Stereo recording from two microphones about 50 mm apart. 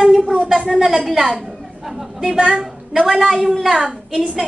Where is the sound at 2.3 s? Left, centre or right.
Centre.